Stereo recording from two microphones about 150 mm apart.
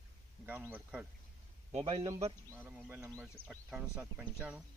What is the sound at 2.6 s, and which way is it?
Speech, 10° right (ahead or behind).